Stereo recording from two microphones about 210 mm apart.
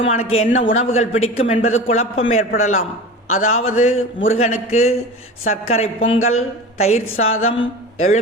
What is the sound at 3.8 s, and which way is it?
Speech, 70° left (ahead or behind).